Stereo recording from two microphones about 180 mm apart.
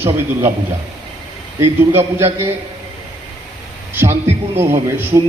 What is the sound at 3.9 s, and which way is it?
A man's voice, 15° right (ahead or behind).